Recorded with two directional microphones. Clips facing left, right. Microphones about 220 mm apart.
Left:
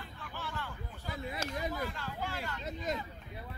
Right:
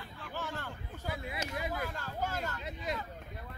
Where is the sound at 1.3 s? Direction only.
40° left (ahead or behind).